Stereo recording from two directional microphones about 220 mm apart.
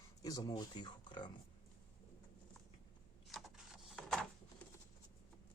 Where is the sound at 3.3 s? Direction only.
Centre (ahead or behind).